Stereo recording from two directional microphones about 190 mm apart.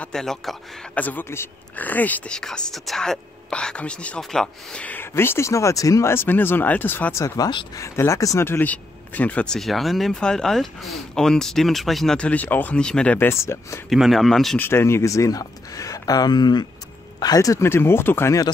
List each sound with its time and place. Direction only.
0.0 s speech: centre (ahead or behind)
13.8 s speech: centre (ahead or behind)
14.7 s speech: 15° left (ahead or behind)